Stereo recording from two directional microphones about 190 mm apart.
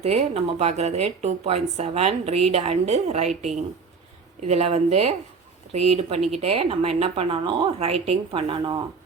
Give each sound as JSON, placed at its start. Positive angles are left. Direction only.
{"t": 0.0, "sound": "speech", "side_deg": -35}